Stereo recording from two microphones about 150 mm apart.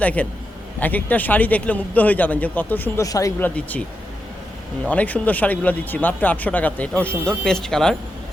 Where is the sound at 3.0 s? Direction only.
20° left (ahead or behind).